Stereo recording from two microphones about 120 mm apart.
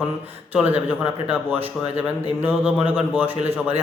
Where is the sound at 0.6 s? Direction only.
15° right (ahead or behind).